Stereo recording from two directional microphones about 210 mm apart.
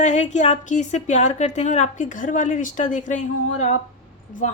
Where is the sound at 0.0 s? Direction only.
35° left (ahead or behind).